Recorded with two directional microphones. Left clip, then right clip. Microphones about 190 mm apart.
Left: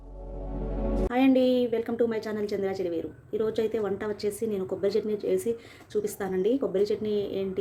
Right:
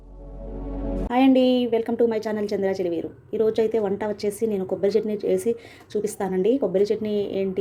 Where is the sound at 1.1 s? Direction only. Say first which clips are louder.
Right 5 dB; 25° right (ahead or behind).